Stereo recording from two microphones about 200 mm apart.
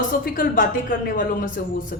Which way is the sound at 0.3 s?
45° left (ahead or behind).